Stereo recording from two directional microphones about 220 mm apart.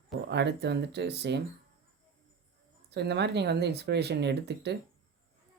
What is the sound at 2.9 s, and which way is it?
Speech, 50° right (ahead or behind).